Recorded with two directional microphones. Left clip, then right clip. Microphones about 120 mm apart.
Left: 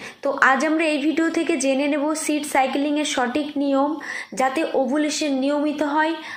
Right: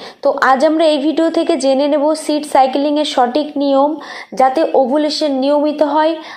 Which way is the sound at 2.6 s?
50° left (ahead or behind).